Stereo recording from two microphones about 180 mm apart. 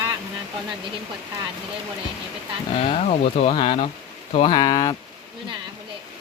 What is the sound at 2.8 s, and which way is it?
Speech, 35° left (ahead or behind).